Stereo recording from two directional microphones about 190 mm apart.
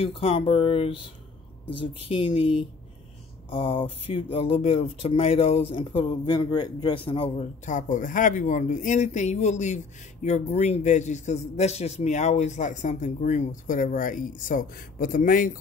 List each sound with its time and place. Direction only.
0.0 s speech: 30° left (ahead or behind)
2.0 s speech: 30° left (ahead or behind); by 15.5 s 45° left (ahead or behind)